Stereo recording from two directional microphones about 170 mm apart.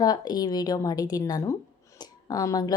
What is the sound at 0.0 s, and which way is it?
Speech, 25° left (ahead or behind).